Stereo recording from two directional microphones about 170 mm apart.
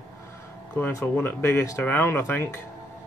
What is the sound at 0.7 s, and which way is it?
Speech, 10° left (ahead or behind).